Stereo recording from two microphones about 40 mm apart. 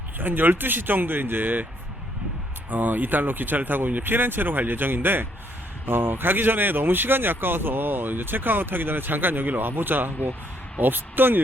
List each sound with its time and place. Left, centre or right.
0.2 s speech: right
2.6 s speech: right